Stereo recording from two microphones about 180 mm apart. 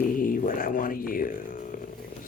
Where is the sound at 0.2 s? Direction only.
50° left (ahead or behind).